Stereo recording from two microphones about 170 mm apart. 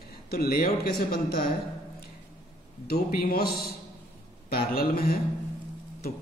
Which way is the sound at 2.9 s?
65° left (ahead or behind).